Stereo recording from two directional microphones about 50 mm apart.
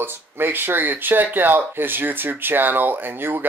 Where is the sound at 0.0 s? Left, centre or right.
Right.